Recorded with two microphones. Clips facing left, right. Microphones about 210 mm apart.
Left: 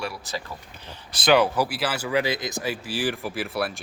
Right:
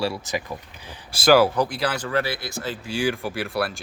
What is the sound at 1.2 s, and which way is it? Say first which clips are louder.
Speech: right 3 dB; 5° right (ahead or behind).